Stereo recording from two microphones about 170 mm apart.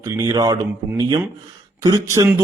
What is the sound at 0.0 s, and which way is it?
A man's voice, 20° right (ahead or behind).